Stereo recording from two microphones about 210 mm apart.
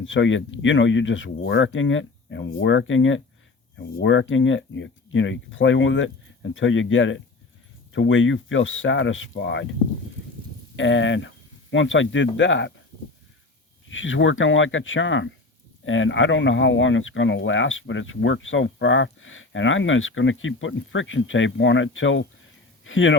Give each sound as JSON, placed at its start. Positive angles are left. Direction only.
{"t": 0.0, "sound": "speech", "side_deg": 65}
{"t": 10.8, "sound": "speech", "side_deg": 65}
{"t": 13.9, "sound": "speech", "side_deg": 65}